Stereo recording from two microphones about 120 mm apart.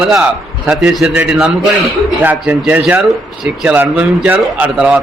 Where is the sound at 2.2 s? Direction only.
15° right (ahead or behind).